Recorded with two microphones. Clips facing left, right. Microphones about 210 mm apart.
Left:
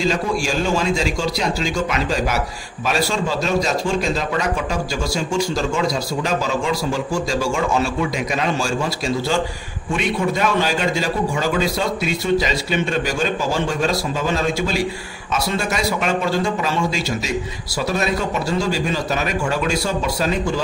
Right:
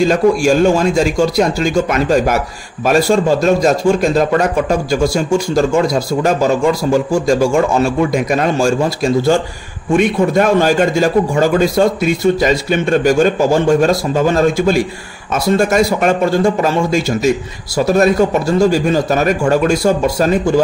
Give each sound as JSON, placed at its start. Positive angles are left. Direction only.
{"t": 0.0, "sound": "speech", "side_deg": -50}